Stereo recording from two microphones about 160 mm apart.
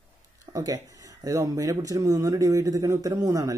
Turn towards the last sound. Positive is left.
turn(degrees=-20)  # may be behind; listen again after turning